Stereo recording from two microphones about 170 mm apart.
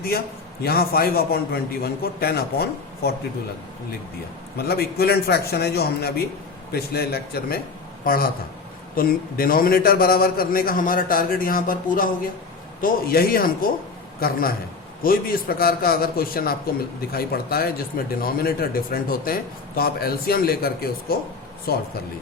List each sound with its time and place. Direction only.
0.6 s a man's voice: 65° left (ahead or behind)
4.5 s a man's voice: 65° left (ahead or behind)